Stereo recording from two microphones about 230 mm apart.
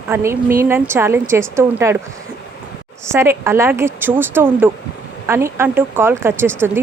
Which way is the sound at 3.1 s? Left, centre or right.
Centre.